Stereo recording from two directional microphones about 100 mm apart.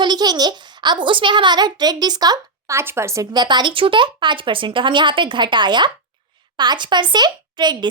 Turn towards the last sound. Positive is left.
turn(degrees=-45)  # may be behind; listen again after turning